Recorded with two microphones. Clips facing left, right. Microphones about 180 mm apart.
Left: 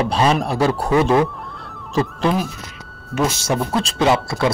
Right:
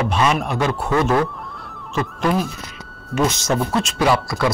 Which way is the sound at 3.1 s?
5° left (ahead or behind).